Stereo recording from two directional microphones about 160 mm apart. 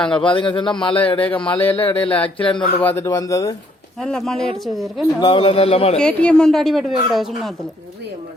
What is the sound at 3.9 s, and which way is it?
A woman's voice, centre (ahead or behind).